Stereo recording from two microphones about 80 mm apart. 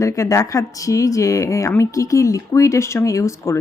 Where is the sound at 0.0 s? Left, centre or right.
Left.